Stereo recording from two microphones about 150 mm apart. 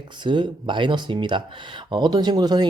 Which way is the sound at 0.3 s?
30° right (ahead or behind).